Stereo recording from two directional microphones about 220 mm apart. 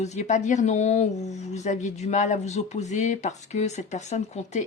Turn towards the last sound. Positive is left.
turn(degrees=30)  # may be behind; listen again after turning